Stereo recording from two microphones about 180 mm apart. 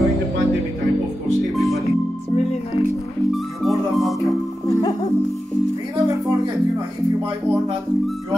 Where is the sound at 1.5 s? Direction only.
Centre (ahead or behind).